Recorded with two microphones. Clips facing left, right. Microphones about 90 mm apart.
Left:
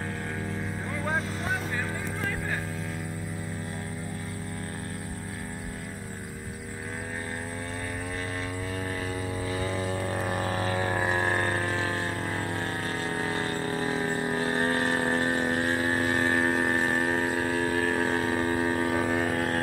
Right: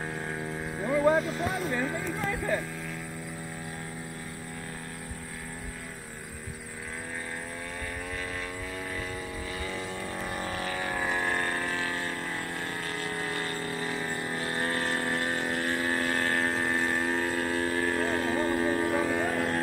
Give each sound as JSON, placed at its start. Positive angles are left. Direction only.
{"t": 9.5, "sound": "didgeridoo", "side_deg": 35}
{"t": 12.6, "sound": "a sound", "side_deg": 30}
{"t": 15.2, "sound": "vehicle", "side_deg": 20}
{"t": 19.1, "sound": "music", "side_deg": 5}